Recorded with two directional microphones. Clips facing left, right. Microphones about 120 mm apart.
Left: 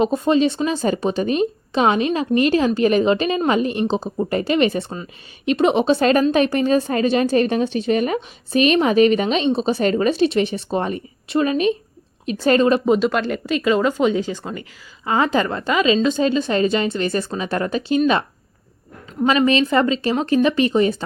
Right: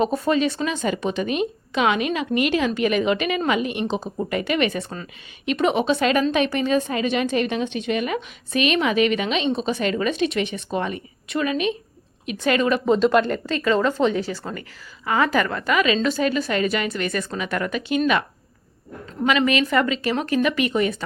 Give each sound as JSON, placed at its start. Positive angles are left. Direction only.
{"t": 0.0, "sound": "a woman's voice", "side_deg": 25}
{"t": 13.0, "sound": "a woman's voice", "side_deg": 0}
{"t": 13.5, "sound": "a woman's voice", "side_deg": 15}
{"t": 19.2, "sound": "a woman's voice", "side_deg": 30}